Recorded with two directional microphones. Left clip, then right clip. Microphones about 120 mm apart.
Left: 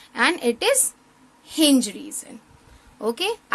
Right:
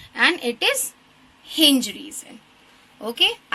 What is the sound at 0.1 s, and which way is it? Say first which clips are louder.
A woman's voice: right 1 dB; 50° left (ahead or behind).